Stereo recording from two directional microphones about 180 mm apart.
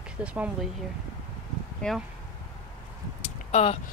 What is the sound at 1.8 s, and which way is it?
Speech, 5° left (ahead or behind).